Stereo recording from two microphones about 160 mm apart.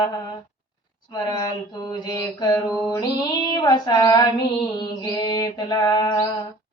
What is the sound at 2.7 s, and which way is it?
Mantra, 25° left (ahead or behind).